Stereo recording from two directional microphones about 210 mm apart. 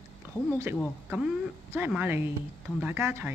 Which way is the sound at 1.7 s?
10° right (ahead or behind).